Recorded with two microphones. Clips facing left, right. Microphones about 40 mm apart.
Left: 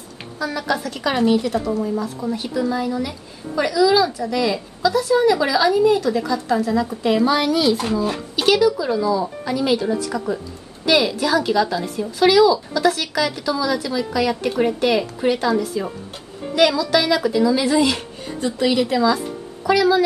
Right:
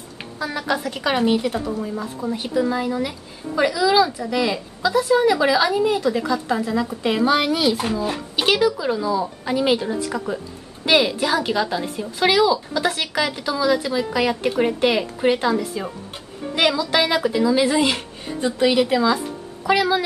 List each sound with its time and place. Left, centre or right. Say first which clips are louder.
0.4 s speech: left 1 dB; right
8.4 s speech: left 2 dB; right
9.4 s speech: even; right